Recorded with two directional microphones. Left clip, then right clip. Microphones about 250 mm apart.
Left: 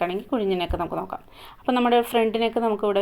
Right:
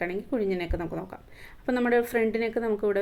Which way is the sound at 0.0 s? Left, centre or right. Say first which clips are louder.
Left 4 dB; left.